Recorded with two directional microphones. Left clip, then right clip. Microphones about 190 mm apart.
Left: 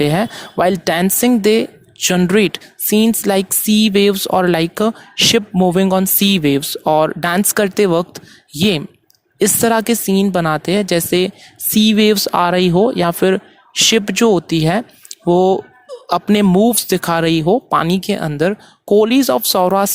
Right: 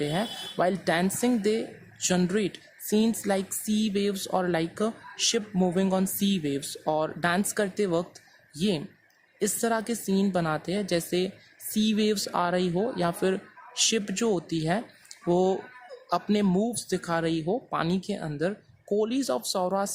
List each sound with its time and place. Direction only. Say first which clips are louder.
0.0 s speech: left 13 dB; 45° left (ahead or behind)